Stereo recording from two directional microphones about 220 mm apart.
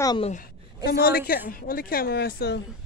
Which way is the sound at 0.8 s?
45° left (ahead or behind).